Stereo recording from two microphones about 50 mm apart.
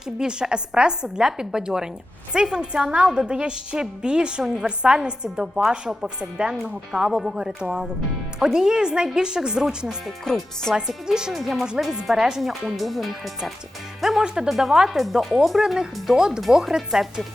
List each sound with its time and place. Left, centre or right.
0.2 s a woman's voice: centre
10.3 s speech: centre
10.8 s a woman's voice: centre
11.3 s speech: centre
14.3 s a woman's voice: centre
14.5 s a woman's voice: centre